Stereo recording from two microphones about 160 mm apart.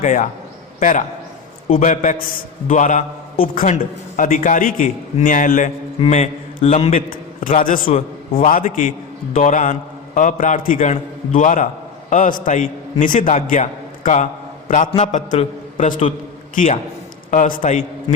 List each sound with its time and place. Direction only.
0.0 s a man's voice: 50° left (ahead or behind)
6.0 s a man's voice: 40° left (ahead or behind)
7.1 s a man's voice: 60° left (ahead or behind)
7.9 s a man's voice: 35° left (ahead or behind)
8.4 s a man's voice: 55° left (ahead or behind)
17.3 s a man's voice: 55° left (ahead or behind)